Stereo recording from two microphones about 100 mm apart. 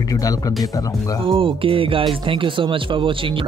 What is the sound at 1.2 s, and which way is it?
Speech, 60° right (ahead or behind).